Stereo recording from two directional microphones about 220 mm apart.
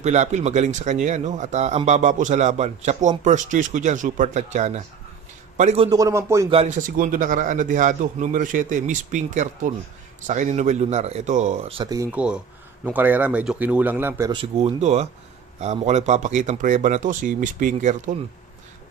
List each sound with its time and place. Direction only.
0.0 s a man's voice: 30° right (ahead or behind); by 6.5 s 15° right (ahead or behind)
6.5 s a man's voice: 30° right (ahead or behind)
11.9 s a man's voice: 10° right (ahead or behind)
14.4 s a man's voice: 30° right (ahead or behind)